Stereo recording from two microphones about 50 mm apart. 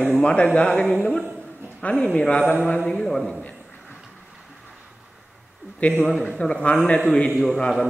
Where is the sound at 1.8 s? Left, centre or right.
Left.